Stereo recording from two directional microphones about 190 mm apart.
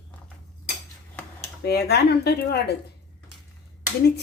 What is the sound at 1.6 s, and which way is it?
A woman's voice, 60° left (ahead or behind).